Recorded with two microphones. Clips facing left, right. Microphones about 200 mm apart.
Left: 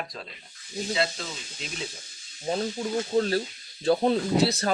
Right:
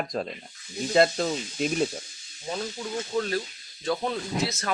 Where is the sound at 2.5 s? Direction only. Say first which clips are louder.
Left 4 dB; 35° left (ahead or behind).